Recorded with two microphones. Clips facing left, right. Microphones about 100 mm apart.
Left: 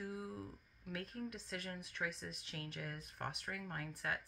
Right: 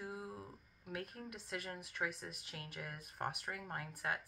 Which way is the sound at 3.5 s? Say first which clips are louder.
Even; 25° right (ahead or behind).